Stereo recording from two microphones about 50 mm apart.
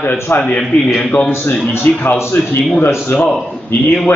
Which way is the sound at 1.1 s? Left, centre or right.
Left.